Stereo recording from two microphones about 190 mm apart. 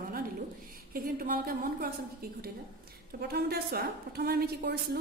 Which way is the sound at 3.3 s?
55° right (ahead or behind).